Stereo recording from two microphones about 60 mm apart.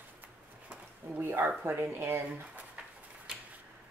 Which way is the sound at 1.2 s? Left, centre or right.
Right.